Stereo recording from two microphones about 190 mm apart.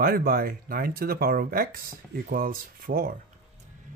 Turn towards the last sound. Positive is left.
turn(degrees=-50)  # may be behind; listen again after turning